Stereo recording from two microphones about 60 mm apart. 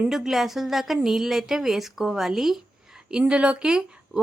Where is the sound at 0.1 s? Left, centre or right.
Centre.